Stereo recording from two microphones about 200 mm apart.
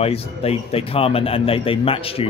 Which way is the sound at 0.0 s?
30° left (ahead or behind).